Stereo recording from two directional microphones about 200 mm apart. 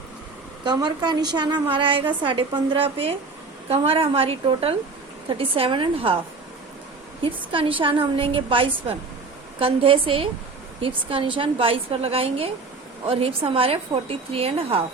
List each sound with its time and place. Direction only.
0.6 s a woman's voice: 20° right (ahead or behind)
7.3 s a woman's voice: 25° right (ahead or behind)